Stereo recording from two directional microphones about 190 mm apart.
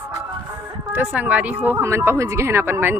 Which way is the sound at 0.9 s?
5° right (ahead or behind).